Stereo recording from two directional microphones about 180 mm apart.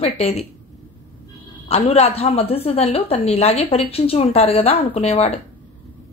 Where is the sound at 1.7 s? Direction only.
35° left (ahead or behind).